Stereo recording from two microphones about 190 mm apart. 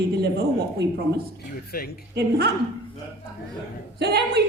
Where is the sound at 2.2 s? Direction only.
60° right (ahead or behind).